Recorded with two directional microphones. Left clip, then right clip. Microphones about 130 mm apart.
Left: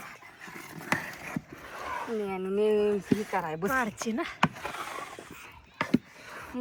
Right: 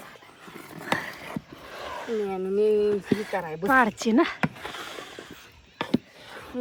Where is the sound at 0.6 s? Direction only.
40° right (ahead or behind).